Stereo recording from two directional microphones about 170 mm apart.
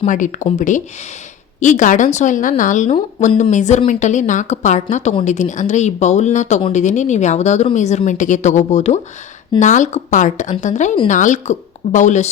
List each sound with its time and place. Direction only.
0.0 s a woman's voice: 45° left (ahead or behind)